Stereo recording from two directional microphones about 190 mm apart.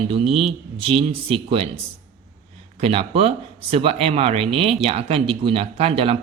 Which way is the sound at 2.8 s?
30° right (ahead or behind).